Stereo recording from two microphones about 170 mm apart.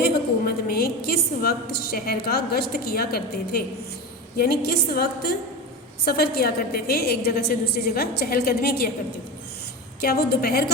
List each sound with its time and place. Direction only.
0.0 s a woman's voice: 65° left (ahead or behind)
10.0 s a woman's voice: 65° left (ahead or behind)